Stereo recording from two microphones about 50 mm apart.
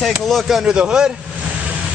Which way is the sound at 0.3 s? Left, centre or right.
Centre.